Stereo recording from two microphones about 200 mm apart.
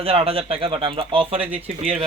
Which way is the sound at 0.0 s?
30° right (ahead or behind).